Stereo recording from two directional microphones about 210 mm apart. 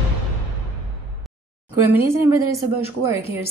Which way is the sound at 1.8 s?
10° right (ahead or behind).